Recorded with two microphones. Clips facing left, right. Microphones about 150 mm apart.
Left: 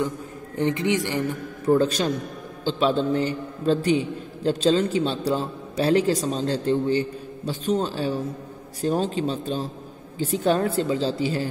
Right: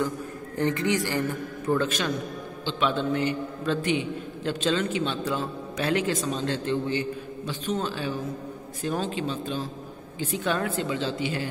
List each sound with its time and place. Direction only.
0.6 s a man's voice: 20° left (ahead or behind)
1.8 s a man's voice: 40° left (ahead or behind)